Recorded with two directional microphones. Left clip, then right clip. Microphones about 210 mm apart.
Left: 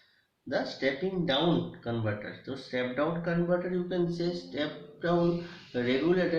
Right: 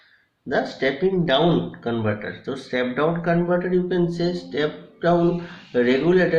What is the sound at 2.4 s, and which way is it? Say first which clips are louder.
Speech: right 8 dB; 50° right (ahead or behind).